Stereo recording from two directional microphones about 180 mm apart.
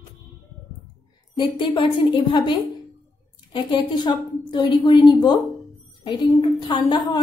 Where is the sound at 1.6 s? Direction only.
25° left (ahead or behind).